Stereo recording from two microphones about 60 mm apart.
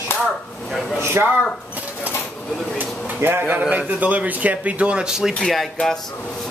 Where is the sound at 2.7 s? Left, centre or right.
Right; by 5.3 s centre.